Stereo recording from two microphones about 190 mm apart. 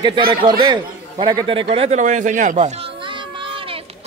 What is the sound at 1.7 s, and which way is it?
Speech, 35° right (ahead or behind).